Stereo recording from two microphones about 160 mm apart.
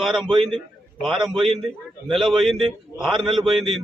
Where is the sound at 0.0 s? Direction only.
5° right (ahead or behind).